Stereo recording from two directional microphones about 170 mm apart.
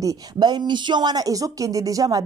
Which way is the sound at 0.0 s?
20° right (ahead or behind).